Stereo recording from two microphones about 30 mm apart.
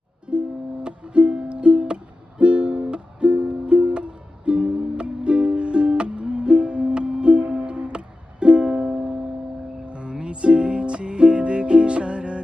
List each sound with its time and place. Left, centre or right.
0.3 s music: right